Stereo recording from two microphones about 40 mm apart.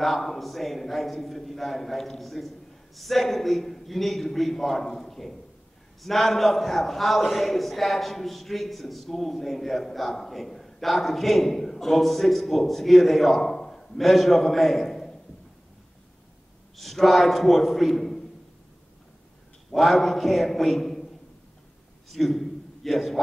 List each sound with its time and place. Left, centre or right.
0.0 s a man's voice: centre
16.7 s a man's voice: centre
19.7 s a man's voice: centre
22.1 s a sound: centre